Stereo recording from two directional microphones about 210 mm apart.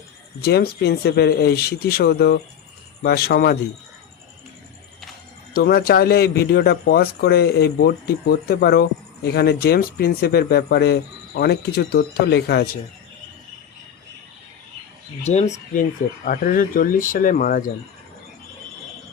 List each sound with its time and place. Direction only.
0.4 s speech: 50° left (ahead or behind)
5.5 s speech: 45° left (ahead or behind)
15.2 s speech: 30° left (ahead or behind)